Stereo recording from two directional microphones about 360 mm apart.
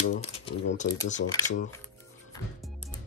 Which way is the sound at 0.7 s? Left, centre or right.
Left.